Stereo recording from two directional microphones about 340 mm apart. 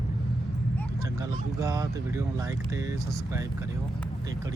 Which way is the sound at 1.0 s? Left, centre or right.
Centre.